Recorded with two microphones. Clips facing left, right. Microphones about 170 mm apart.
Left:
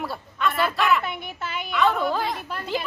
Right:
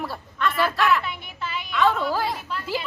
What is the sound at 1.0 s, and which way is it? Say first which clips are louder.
Speech: left 2 dB; 50° left (ahead or behind).